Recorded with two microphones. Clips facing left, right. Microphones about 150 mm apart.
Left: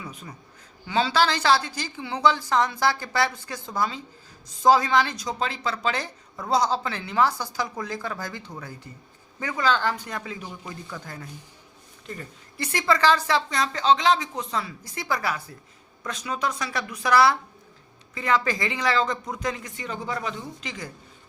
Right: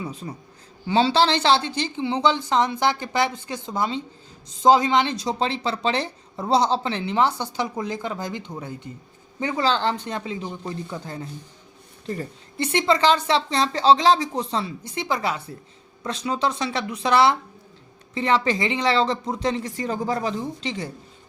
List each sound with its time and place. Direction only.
0.0 s a woman's voice: 30° right (ahead or behind)